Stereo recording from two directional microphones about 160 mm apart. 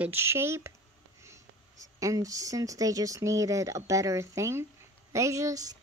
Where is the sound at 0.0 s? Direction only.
15° right (ahead or behind).